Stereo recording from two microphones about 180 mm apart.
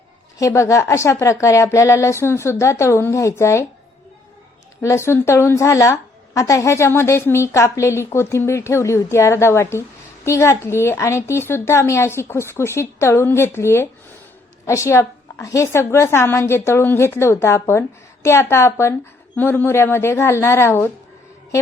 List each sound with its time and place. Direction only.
0.3 s a woman's voice: 15° left (ahead or behind)
4.8 s a woman's voice: 15° left (ahead or behind)